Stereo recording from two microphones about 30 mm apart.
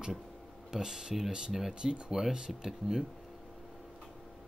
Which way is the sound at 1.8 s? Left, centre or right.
Right.